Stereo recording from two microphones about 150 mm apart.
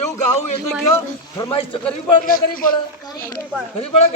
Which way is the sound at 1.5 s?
35° left (ahead or behind).